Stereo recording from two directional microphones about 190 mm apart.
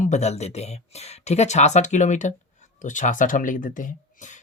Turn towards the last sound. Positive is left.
turn(degrees=40)  # may be behind; listen again after turning